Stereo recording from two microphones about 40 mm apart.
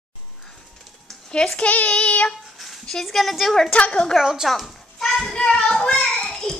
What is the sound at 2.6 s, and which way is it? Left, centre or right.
A woman's voice, centre.